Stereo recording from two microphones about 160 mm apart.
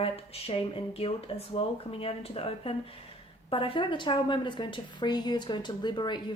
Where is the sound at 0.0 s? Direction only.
35° left (ahead or behind).